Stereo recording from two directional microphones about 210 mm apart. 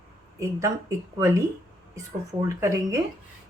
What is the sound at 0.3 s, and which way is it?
Speech, 15° right (ahead or behind).